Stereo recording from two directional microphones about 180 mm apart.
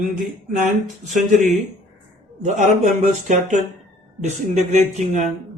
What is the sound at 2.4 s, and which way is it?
Speech, 40° right (ahead or behind).